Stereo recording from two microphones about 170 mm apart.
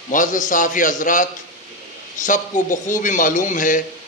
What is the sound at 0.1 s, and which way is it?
A man's voice, 50° left (ahead or behind).